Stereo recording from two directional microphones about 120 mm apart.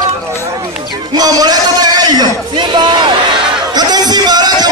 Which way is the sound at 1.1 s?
35° right (ahead or behind).